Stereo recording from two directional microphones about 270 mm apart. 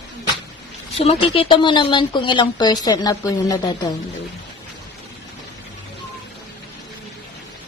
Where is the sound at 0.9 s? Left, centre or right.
Left.